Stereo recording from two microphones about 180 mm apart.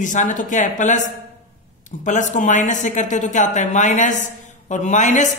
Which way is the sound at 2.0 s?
45° left (ahead or behind).